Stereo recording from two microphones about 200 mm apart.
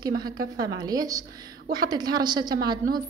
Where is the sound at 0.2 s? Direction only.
20° right (ahead or behind).